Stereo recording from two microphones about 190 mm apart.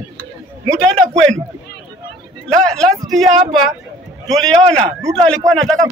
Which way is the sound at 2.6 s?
Centre (ahead or behind).